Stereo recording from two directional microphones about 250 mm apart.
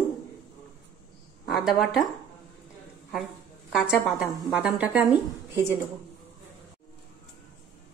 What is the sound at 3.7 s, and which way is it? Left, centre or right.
A woman's voice, centre.